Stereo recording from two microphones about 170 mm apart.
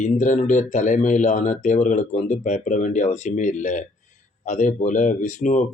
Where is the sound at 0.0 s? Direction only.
45° left (ahead or behind).